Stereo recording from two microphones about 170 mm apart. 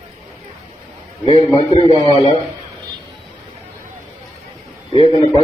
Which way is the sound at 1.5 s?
30° left (ahead or behind).